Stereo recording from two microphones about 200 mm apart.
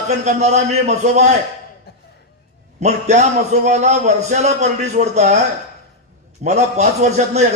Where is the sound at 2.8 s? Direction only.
35° right (ahead or behind).